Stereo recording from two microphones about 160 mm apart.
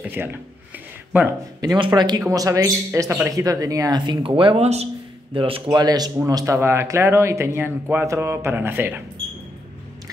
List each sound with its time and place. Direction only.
0.1 s speech: 15° right (ahead or behind)
1.6 s speech: 25° right (ahead or behind)